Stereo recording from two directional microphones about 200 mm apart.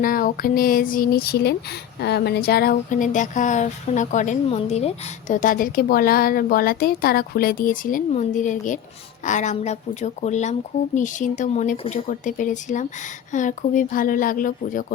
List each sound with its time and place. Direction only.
0.0 s a woman's voice: 45° left (ahead or behind); by 4.9 s 30° left (ahead or behind)
5.3 s a woman's voice: 40° left (ahead or behind)
11.8 s speech: 30° left (ahead or behind)
12.0 s a woman's voice: 40° left (ahead or behind)